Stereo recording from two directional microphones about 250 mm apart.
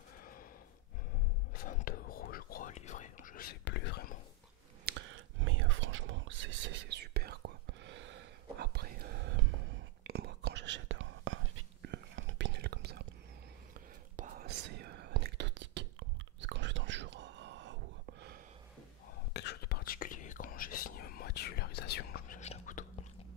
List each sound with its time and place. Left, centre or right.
0.2 s a sound: left
1.5 s whispering: left
4.8 s whispering: right
14.1 s whispering: right
19.3 s whispering: left
22.4 s whispering: left